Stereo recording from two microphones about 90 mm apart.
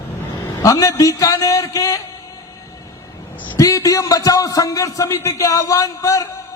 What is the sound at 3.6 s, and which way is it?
A man's voice, 40° left (ahead or behind).